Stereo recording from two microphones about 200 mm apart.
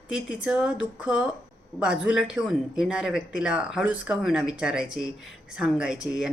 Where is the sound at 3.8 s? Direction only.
75° left (ahead or behind).